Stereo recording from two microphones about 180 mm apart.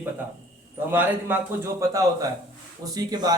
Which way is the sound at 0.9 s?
10° right (ahead or behind).